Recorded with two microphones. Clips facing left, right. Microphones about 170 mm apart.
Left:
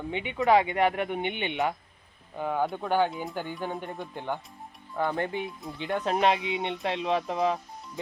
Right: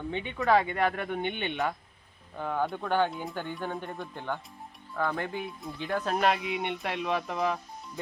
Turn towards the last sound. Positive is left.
turn(degrees=25)  # may be behind; listen again after turning